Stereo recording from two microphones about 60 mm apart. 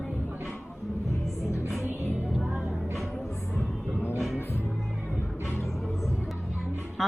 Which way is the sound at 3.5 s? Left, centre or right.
Left.